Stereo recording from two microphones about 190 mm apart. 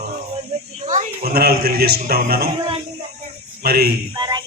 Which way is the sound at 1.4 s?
55° right (ahead or behind).